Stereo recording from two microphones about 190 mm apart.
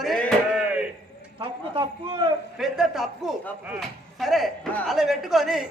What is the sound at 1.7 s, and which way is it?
Speech, 25° right (ahead or behind).